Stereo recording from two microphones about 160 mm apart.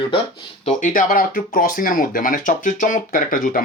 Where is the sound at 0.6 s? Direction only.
50° left (ahead or behind).